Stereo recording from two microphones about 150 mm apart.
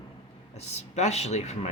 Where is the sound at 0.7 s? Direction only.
50° left (ahead or behind).